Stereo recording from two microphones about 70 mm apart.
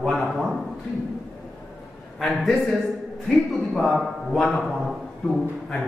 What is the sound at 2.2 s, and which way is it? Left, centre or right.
A man's voice, centre.